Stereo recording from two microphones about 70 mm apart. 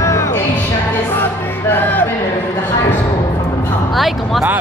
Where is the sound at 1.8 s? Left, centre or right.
Left.